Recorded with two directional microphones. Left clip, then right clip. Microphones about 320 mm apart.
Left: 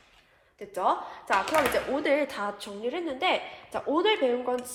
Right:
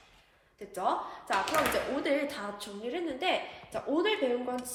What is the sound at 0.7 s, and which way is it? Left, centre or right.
A woman's voice, left.